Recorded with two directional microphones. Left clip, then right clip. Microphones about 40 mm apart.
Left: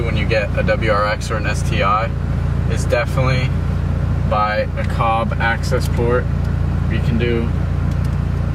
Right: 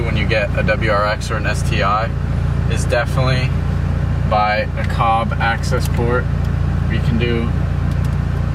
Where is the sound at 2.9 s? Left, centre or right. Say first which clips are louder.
Even; right.